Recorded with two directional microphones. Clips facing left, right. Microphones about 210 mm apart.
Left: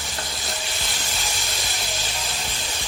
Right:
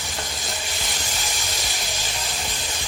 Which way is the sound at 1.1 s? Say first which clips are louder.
Even; 15° right (ahead or behind).